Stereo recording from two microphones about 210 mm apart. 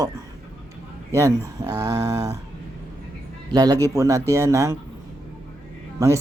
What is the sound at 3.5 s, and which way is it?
Speech, 20° right (ahead or behind).